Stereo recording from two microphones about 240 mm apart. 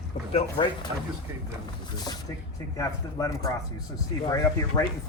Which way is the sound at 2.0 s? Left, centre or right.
Centre.